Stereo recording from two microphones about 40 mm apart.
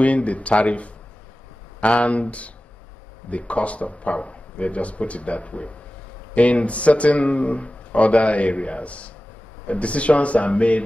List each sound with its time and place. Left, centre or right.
0.0 s speech: left